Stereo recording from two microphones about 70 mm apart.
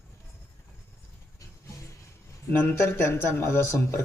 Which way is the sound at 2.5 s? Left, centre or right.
Left.